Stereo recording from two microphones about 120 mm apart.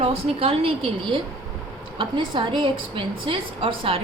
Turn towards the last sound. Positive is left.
turn(degrees=-50)  # may be behind; listen again after turning